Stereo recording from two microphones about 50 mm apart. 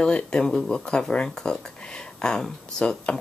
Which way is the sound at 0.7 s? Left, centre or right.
Centre.